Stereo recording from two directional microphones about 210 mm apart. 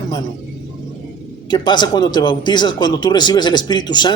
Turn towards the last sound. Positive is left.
turn(degrees=20)  # may be behind; listen again after turning